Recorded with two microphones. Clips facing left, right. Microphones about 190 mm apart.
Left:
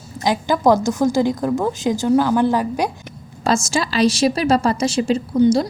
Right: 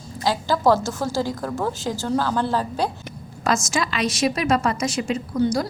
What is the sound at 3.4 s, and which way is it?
A woman's voice, 30° left (ahead or behind).